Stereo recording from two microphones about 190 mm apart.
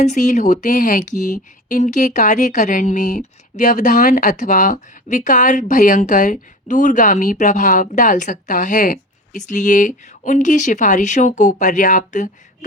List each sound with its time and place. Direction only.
0.0 s speech: 40° left (ahead or behind)